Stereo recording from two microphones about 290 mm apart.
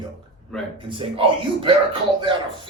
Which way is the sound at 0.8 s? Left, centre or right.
Centre.